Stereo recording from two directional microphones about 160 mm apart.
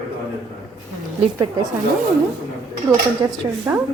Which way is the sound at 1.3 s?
20° right (ahead or behind).